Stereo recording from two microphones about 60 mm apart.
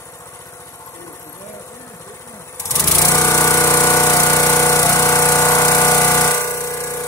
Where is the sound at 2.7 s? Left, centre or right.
Left.